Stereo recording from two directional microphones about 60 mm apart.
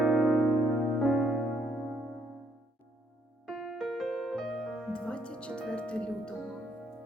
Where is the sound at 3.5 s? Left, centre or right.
Centre.